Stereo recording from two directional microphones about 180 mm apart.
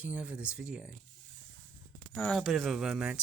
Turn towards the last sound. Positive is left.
turn(degrees=-5)  # may be behind; listen again after turning